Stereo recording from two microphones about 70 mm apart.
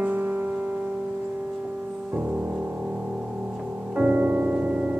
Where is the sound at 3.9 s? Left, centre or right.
Right.